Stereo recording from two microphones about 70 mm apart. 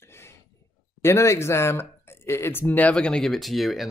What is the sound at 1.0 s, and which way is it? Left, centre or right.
Speech, left.